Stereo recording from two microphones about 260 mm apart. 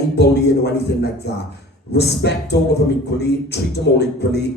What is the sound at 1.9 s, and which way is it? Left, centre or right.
Speech, left.